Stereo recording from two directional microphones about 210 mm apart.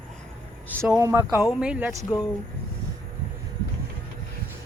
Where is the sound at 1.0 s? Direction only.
15° right (ahead or behind).